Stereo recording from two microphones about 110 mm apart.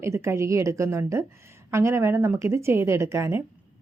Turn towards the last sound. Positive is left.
turn(degrees=-20)  # may be behind; listen again after turning